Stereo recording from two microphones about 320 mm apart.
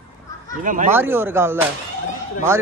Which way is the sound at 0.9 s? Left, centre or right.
Centre.